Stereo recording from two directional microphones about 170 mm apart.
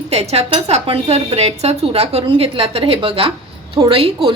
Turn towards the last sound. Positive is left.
turn(degrees=-35)  # may be behind; listen again after turning